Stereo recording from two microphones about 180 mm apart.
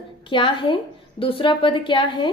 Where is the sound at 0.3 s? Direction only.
30° left (ahead or behind).